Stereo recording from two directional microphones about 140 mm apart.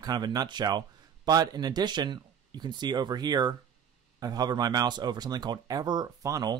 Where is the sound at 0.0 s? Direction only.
25° right (ahead or behind).